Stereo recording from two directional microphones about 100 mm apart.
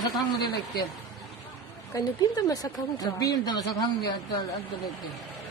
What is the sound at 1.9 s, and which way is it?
Speech, 35° left (ahead or behind).